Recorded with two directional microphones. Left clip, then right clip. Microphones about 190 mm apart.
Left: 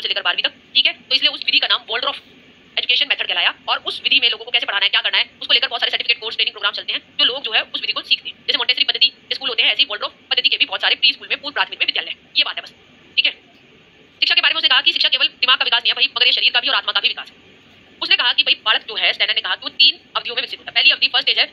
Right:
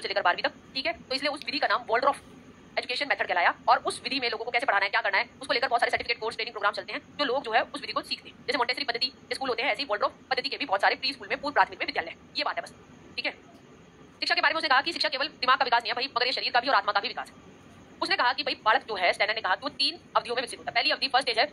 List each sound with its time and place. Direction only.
0.0 s speech: 35° right (ahead or behind)
3.3 s speech: 35° right (ahead or behind)
14.2 s speech: 40° right (ahead or behind)